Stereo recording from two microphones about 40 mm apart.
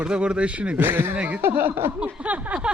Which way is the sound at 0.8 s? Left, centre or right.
Right.